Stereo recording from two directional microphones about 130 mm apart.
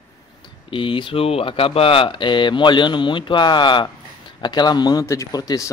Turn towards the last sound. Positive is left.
turn(degrees=30)  # may be behind; listen again after turning